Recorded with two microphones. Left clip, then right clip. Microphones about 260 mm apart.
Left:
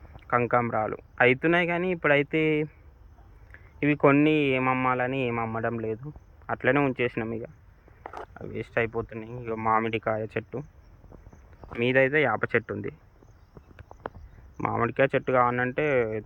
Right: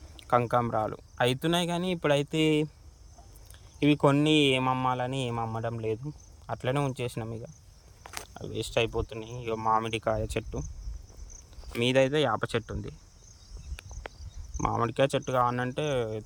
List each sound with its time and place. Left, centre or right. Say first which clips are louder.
0.3 s speech: left 1 dB; right
3.8 s speech: left 3 dB; right
9.1 s speech: even; right
9.6 s speech: left 2 dB; right
11.8 s speech: left 2 dB; right
14.6 s speech: left 2 dB; right